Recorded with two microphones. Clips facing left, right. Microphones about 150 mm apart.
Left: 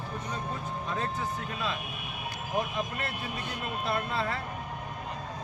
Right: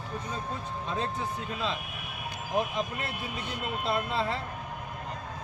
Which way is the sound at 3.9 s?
25° right (ahead or behind).